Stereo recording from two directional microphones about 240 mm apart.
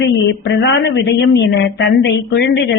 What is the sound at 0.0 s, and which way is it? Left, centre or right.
A woman's voice, left.